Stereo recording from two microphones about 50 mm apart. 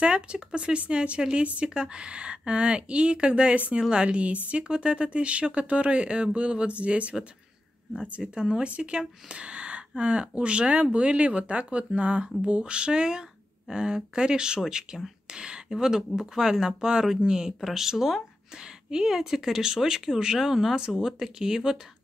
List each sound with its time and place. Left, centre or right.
0.0 s a woman's voice: right